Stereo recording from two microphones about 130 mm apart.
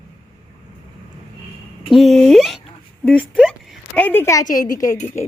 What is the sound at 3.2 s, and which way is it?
Speech, centre (ahead or behind).